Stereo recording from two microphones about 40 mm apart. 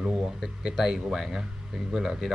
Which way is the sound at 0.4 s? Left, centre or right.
Centre.